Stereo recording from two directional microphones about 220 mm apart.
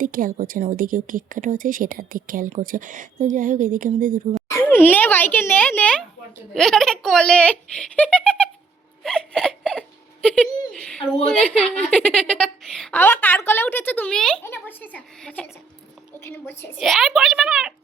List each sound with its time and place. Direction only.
0.0 s a woman's voice: 40° right (ahead or behind)
4.5 s a woman's voice: 10° left (ahead or behind)